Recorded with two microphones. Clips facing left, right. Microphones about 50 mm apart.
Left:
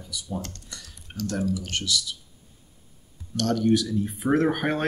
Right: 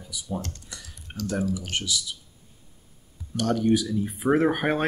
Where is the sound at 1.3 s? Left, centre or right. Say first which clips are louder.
Even; centre.